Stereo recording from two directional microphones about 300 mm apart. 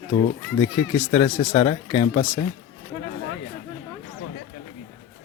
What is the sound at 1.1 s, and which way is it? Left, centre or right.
Speech, centre.